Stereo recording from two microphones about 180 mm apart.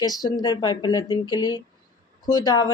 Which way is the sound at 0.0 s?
20° left (ahead or behind).